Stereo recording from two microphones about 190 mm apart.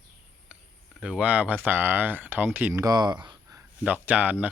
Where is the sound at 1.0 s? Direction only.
5° right (ahead or behind).